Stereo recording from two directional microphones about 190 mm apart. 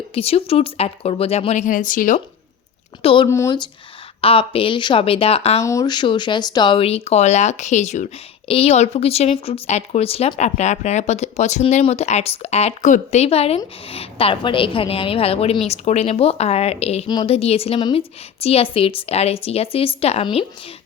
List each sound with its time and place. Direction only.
0.1 s speech: 30° left (ahead or behind)
3.0 s speech: 30° left (ahead or behind)
3.2 s speech: 15° left (ahead or behind); by 5.5 s 30° left (ahead or behind)
5.6 s speech: 20° left (ahead or behind)